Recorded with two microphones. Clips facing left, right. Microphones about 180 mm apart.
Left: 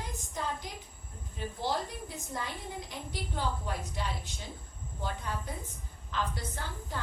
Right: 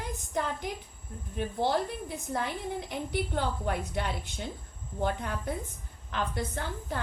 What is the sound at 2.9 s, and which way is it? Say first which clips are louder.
A woman's voice: right 8 dB; 60° right (ahead or behind).